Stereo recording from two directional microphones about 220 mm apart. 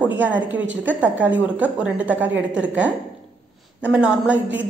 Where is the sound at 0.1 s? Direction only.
5° right (ahead or behind).